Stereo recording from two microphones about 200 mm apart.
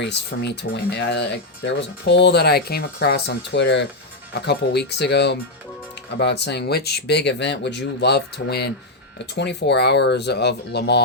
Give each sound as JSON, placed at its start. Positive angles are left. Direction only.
{"t": 0.0, "sound": "speech", "side_deg": 60}